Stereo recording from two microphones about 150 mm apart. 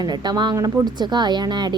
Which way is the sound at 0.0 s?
30° right (ahead or behind).